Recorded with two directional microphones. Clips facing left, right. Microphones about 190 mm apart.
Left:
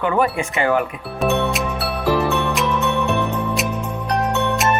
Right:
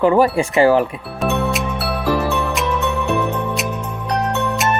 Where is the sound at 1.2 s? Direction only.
Centre (ahead or behind).